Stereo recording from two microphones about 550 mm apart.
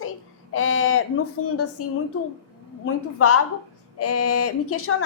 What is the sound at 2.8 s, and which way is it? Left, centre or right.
A woman's voice, left.